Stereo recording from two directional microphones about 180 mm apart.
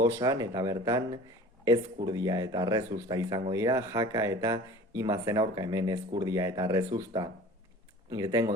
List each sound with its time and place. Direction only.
0.0 s speech: 20° right (ahead or behind)